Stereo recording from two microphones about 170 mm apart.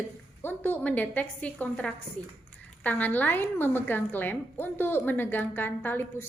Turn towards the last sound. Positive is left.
turn(degrees=10)  # may be behind; listen again after turning